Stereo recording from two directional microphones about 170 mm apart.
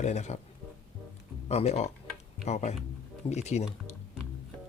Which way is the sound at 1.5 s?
40° left (ahead or behind).